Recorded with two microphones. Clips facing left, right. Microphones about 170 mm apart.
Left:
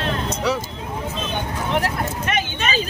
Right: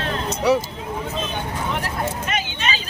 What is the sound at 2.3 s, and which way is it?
Vehicle, 50° left (ahead or behind).